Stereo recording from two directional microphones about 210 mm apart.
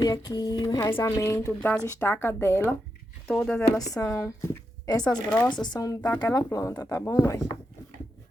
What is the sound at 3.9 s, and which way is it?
Speech, 15° left (ahead or behind).